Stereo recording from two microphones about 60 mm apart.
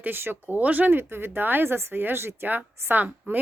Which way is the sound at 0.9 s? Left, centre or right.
Right.